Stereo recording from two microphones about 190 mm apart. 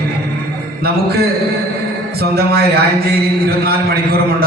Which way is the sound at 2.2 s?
55° right (ahead or behind).